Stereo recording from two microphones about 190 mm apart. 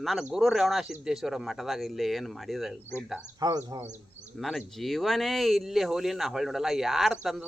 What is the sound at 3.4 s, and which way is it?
Speech, 20° right (ahead or behind).